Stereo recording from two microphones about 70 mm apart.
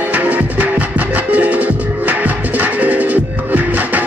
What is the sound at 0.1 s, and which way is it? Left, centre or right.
Music, right.